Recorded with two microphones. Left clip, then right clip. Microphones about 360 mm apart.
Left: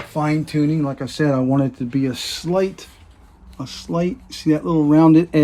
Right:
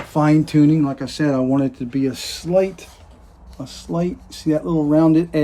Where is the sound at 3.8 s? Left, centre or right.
Left.